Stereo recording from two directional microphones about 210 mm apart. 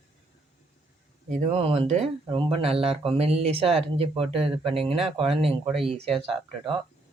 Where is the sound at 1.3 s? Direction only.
25° right (ahead or behind).